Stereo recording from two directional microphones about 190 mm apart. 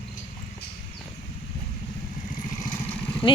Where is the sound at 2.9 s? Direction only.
5° left (ahead or behind).